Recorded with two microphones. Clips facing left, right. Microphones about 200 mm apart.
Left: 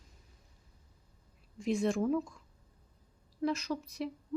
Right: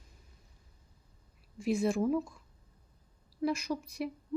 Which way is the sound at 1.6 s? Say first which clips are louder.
Right 1 dB; 5° right (ahead or behind).